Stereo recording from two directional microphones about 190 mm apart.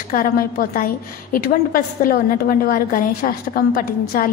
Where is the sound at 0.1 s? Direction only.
50° left (ahead or behind).